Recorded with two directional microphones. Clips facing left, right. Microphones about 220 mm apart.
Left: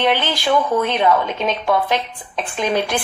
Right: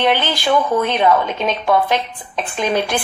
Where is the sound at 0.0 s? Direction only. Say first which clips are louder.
Right 1 dB; 45° right (ahead or behind).